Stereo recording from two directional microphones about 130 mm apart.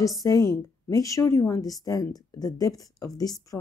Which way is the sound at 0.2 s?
30° left (ahead or behind).